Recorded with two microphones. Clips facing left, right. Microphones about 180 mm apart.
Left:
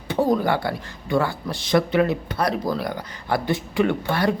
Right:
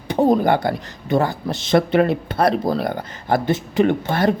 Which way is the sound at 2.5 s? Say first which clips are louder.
Right 4 dB; 30° right (ahead or behind).